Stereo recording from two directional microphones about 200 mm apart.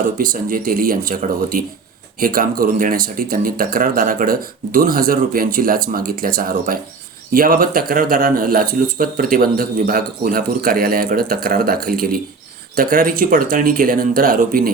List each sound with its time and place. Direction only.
0.2 s speech: 45° right (ahead or behind)